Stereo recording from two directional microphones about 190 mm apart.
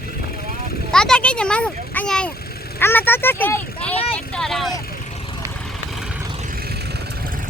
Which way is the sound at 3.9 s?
30° left (ahead or behind).